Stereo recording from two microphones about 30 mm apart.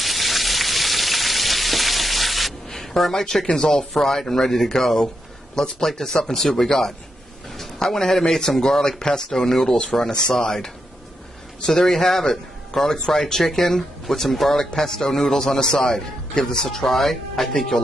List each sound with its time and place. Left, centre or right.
0.0 s frying: centre
2.7 s speech: centre
3.9 s a man's voice: centre; by 9.3 s left
9.3 s a man's voice: centre